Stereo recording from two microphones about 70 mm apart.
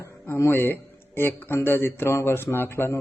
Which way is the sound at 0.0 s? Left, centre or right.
Left.